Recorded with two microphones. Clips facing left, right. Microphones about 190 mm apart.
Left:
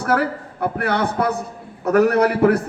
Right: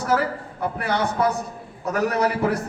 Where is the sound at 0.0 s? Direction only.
60° left (ahead or behind).